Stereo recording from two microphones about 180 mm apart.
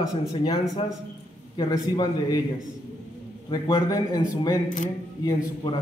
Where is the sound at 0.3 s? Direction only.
30° left (ahead or behind).